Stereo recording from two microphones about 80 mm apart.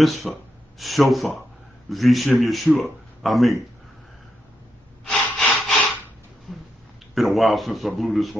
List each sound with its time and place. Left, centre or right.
0.0 s a man's voice: centre
5.5 s rub: centre
7.2 s a man's voice: centre